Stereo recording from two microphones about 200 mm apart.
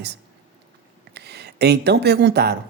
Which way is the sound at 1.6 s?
55° right (ahead or behind).